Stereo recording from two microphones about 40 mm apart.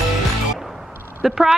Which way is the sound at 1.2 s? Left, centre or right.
Centre.